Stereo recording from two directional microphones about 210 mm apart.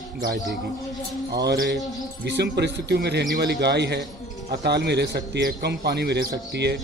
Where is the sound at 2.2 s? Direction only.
55° right (ahead or behind).